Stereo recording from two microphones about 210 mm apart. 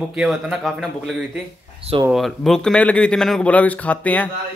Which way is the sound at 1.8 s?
25° right (ahead or behind).